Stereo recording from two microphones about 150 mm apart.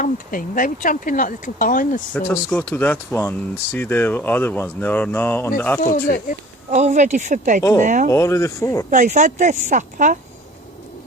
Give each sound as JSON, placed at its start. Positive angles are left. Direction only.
{"t": 0.0, "sound": "speech", "side_deg": 65}
{"t": 2.1, "sound": "speech", "side_deg": 10}
{"t": 5.8, "sound": "speech", "side_deg": 70}
{"t": 6.7, "sound": "speech", "side_deg": -50}
{"t": 8.1, "sound": "speech", "side_deg": 20}
{"t": 8.9, "sound": "speech", "side_deg": -55}